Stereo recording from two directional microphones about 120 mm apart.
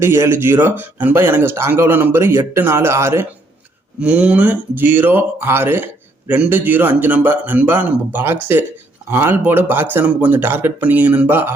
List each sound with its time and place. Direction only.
0.0 s speech: 20° right (ahead or behind)
4.0 s speech: 10° right (ahead or behind)